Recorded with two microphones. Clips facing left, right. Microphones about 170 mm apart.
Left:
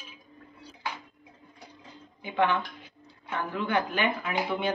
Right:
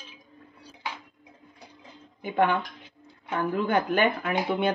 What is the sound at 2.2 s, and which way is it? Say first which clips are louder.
Speech: right 2 dB; 50° right (ahead or behind).